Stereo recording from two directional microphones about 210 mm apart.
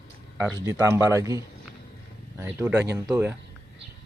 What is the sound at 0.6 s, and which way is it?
Speech, 15° right (ahead or behind).